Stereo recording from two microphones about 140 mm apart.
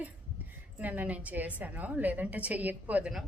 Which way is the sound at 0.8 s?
10° right (ahead or behind).